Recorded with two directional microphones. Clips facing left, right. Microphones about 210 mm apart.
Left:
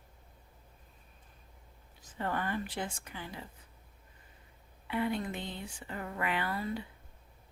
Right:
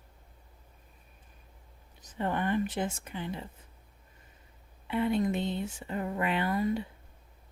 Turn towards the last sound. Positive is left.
turn(degrees=-15)  # may be behind; listen again after turning